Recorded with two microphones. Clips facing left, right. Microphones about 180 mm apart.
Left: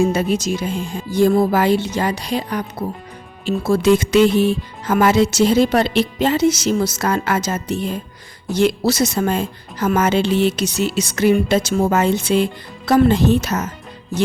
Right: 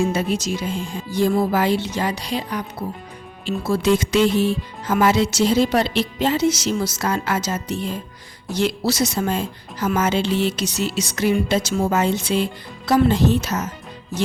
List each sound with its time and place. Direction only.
0.1 s speech: 45° left (ahead or behind)